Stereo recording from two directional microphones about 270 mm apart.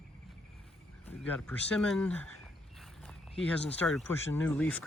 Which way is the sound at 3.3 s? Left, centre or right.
Centre.